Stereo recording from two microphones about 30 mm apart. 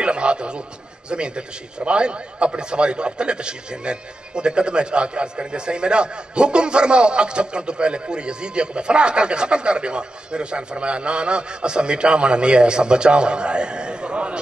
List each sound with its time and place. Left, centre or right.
0.0 s a man's voice: right